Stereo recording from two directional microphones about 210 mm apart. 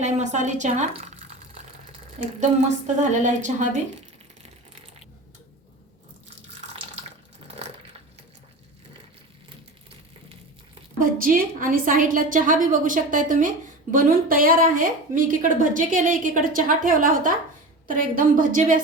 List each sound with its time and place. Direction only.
0.0 s a woman's voice: 35° right (ahead or behind)
2.4 s a woman's voice: 35° right (ahead or behind)
11.0 s a woman's voice: 40° right (ahead or behind)